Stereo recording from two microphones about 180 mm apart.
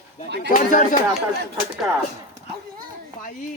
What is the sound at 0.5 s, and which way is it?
Speech, 45° left (ahead or behind).